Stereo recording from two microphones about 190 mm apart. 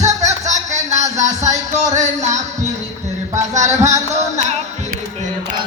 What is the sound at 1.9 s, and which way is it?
Music, 40° right (ahead or behind).